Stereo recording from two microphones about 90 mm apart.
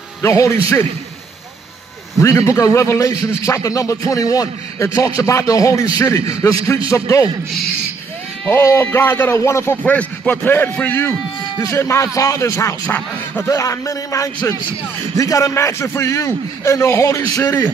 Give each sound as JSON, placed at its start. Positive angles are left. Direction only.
{"t": 0.2, "sound": "a man's voice", "side_deg": 30}
{"t": 2.1, "sound": "a man's voice", "side_deg": 35}
{"t": 8.5, "sound": "speech", "side_deg": 30}
{"t": 9.8, "sound": "a man's voice", "side_deg": 15}
{"t": 12.8, "sound": "speech", "side_deg": 20}
{"t": 13.5, "sound": "a man's voice", "side_deg": 35}